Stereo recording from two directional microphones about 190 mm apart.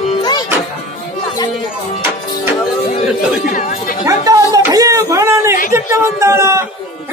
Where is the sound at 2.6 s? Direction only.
5° right (ahead or behind).